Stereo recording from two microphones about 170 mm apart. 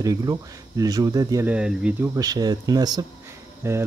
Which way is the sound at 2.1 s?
20° right (ahead or behind).